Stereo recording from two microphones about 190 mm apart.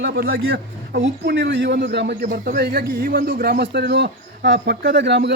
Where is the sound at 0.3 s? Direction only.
90° right.